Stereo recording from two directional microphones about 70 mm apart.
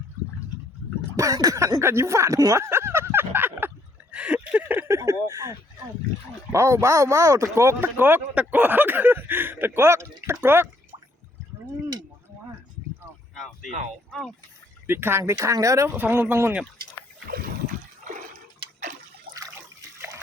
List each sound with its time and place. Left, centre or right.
1.1 s speech: right
2.6 s a sound: right
4.1 s a sound: centre
4.9 s speech: right
7.9 s speech: right
13.3 s a sound: centre
14.1 s speech: centre
14.8 s speech: right
15.2 s speech: right
16.0 s speech: right